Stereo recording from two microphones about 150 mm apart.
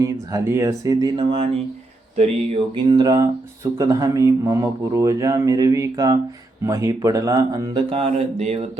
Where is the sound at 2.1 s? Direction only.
45° right (ahead or behind).